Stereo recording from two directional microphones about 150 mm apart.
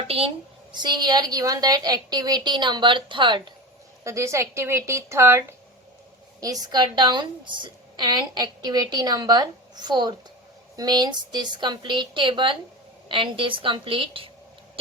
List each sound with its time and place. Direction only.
0.7 s a woman's voice: 30° right (ahead or behind)
4.0 s a woman's voice: 20° right (ahead or behind); by 14.3 s 35° right (ahead or behind)